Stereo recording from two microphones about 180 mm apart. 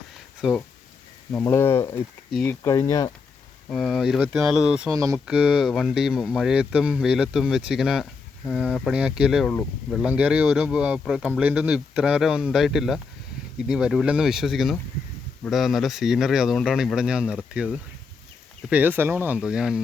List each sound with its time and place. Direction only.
0.4 s speech: 5° right (ahead or behind)
1.3 s speech: 10° left (ahead or behind)
3.7 s speech: centre (ahead or behind)
4.9 s speech: 15° right (ahead or behind)
5.2 s speech: 5° right (ahead or behind)
8.9 s speech: 5° right (ahead or behind)
9.5 s speech: 10° left (ahead or behind)
10.0 s speech: 10° right (ahead or behind)